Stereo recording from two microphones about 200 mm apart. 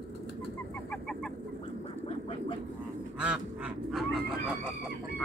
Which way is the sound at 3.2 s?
5° right (ahead or behind).